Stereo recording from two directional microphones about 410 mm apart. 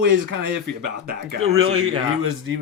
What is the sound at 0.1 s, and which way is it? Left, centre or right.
Speech, right.